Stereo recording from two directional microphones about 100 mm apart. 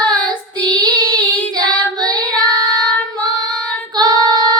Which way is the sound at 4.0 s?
40° right (ahead or behind).